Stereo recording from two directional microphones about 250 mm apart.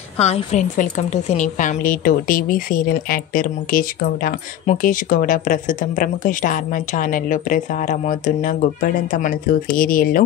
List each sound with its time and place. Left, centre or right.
0.2 s a woman's voice: left